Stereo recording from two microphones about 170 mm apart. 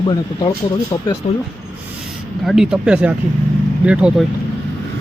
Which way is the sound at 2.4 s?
5° right (ahead or behind).